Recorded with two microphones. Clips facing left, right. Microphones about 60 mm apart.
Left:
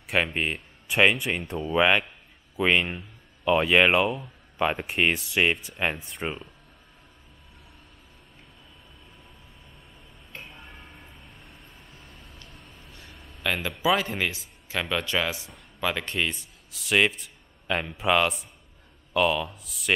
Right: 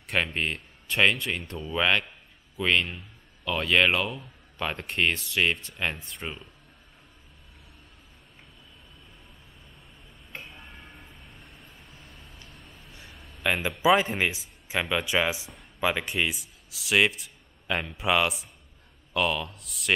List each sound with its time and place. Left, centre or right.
0.0 s speech: centre
10.4 s vehicle: centre
13.1 s a sound: centre
13.4 s speech: centre